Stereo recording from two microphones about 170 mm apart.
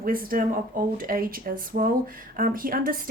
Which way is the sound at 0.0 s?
55° right (ahead or behind).